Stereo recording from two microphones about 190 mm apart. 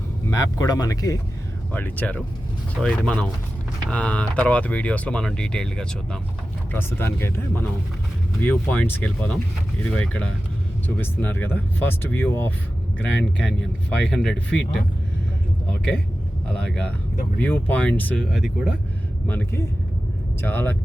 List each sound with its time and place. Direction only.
0.3 s speech: 15° left (ahead or behind)
17.3 s speech: 10° left (ahead or behind)
19.3 s speech: 10° left (ahead or behind)